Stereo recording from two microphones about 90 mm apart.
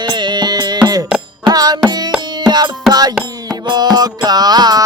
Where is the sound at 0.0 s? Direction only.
55° right (ahead or behind).